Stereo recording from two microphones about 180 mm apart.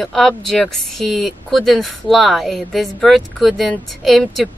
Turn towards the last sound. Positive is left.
turn(degrees=0)  # may be behind; listen again after turning